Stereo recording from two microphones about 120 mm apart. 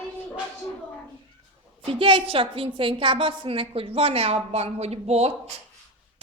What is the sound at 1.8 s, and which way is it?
A woman's voice, 50° right (ahead or behind).